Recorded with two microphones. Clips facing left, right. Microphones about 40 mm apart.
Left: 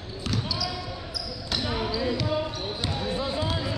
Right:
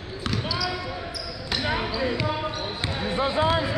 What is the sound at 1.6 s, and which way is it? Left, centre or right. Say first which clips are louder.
Basketball bounce: right 3 dB; right.